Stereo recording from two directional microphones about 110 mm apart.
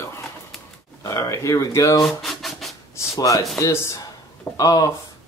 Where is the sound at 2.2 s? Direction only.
Centre (ahead or behind).